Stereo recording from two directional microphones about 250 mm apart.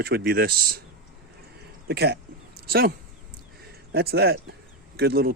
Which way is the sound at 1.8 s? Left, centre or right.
Right.